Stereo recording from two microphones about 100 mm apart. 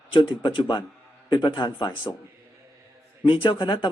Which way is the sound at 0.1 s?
55° left (ahead or behind).